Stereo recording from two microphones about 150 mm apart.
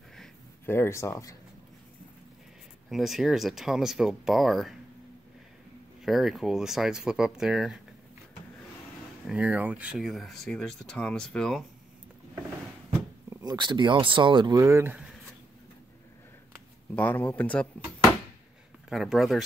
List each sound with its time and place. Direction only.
0.7 s speech: 15° left (ahead or behind)
2.9 s speech: centre (ahead or behind)
6.0 s speech: centre (ahead or behind)
9.2 s speech: 5° right (ahead or behind)
13.3 s speech: 25° right (ahead or behind)
16.9 s speech: 15° left (ahead or behind)
18.9 s speech: 5° right (ahead or behind)